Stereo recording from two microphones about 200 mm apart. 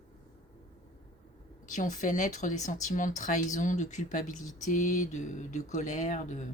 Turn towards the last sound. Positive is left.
turn(degrees=40)  # may be behind; listen again after turning